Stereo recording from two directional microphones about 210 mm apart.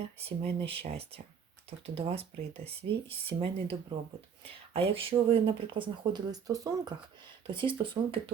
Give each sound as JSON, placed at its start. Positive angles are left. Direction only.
{"t": 0.3, "sound": "speech", "side_deg": -25}